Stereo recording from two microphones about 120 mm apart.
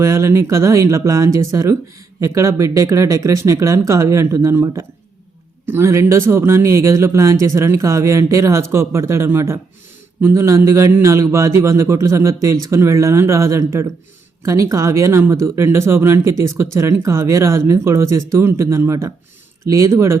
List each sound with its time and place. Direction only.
0.0 s speech: 25° right (ahead or behind)